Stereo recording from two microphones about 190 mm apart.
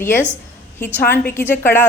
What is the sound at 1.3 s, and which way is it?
Speech, 10° left (ahead or behind).